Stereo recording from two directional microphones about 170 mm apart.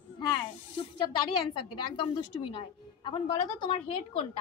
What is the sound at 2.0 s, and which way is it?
A woman's voice, 30° left (ahead or behind).